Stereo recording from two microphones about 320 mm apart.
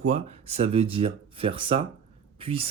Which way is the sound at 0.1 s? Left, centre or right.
Centre.